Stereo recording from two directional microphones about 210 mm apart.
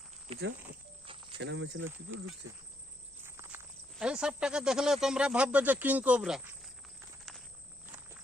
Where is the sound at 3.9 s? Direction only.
5° right (ahead or behind).